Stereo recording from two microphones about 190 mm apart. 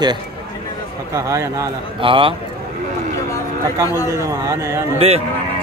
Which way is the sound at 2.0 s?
25° right (ahead or behind).